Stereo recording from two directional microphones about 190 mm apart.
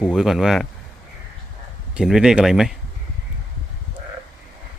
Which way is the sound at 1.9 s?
5° right (ahead or behind).